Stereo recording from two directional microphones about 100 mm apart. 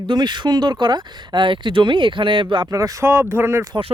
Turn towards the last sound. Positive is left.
turn(degrees=-25)  # may be behind; listen again after turning